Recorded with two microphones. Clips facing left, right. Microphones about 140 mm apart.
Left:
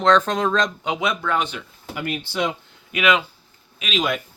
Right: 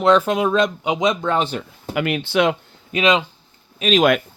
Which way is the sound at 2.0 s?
75° right (ahead or behind).